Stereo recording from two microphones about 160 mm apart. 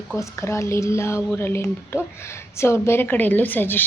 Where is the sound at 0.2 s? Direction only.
20° left (ahead or behind).